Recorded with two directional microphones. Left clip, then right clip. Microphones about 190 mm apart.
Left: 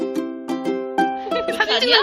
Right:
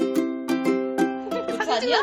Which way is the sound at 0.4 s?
35° left (ahead or behind).